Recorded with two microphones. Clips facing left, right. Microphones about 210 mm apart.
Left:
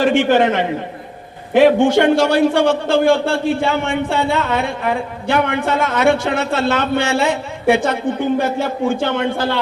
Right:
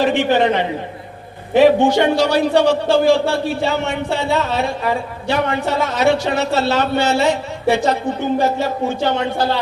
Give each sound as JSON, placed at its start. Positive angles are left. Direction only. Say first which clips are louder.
{"t": 0.0, "sound": "a man's voice", "louder": "left 2 dB", "side_deg": 50}